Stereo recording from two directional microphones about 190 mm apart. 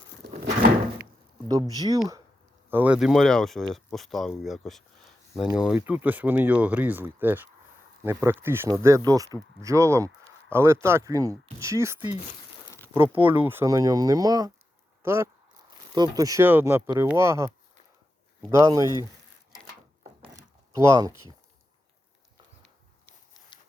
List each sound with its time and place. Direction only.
1.5 s speech: 20° right (ahead or behind)
2.6 s speech: 10° right (ahead or behind)
13.1 s speech: 10° right (ahead or behind)
18.5 s speech: 15° right (ahead or behind)
20.7 s speech: 15° right (ahead or behind)